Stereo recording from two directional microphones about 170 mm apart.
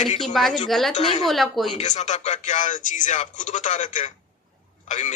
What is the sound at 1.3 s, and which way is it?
Speech, centre (ahead or behind).